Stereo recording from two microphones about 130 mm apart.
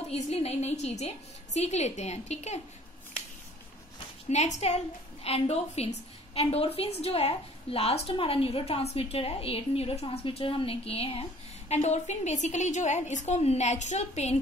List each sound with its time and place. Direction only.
0.1 s a woman's voice: 55° left (ahead or behind)
4.3 s a woman's voice: 60° left (ahead or behind)
11.7 s a woman's voice: 60° left (ahead or behind)